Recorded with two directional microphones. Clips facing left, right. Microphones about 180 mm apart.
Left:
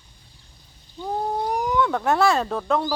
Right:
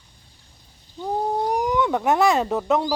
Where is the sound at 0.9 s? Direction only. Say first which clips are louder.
Right 2 dB; 10° right (ahead or behind).